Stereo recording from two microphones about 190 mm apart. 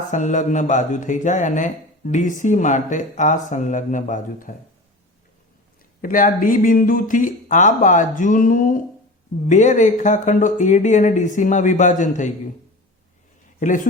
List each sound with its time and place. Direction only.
0.1 s speech: 40° left (ahead or behind)
6.0 s speech: 45° left (ahead or behind)
13.6 s speech: 45° left (ahead or behind)